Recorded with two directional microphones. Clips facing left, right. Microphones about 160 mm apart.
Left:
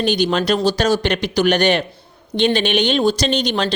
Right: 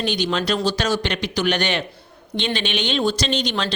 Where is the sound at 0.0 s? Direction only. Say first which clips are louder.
Left 5 dB; 45° left (ahead or behind).